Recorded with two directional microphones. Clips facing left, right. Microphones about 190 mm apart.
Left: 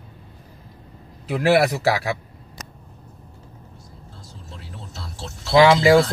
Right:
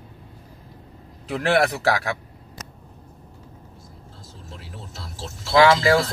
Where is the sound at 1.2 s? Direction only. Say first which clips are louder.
Left 3 dB; 5° left (ahead or behind).